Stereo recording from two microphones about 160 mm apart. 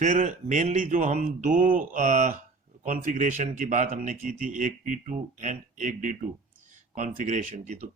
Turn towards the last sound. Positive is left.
turn(degrees=-45)  # may be behind; listen again after turning